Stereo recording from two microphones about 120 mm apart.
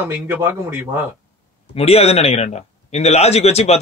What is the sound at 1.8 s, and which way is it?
A man's voice, 60° left (ahead or behind).